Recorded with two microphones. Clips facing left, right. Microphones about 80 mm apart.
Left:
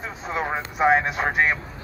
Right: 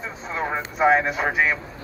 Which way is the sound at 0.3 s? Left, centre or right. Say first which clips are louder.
Even; centre.